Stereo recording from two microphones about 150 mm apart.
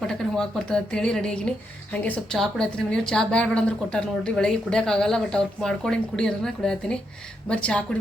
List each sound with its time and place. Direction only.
0.1 s a woman's voice: 5° left (ahead or behind)